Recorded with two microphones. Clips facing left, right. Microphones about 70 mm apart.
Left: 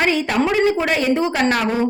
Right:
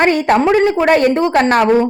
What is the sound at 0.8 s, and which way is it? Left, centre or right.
Speech, right.